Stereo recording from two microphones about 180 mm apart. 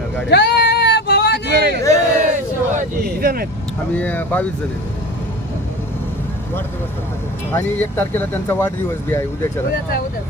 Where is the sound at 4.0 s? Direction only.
10° left (ahead or behind).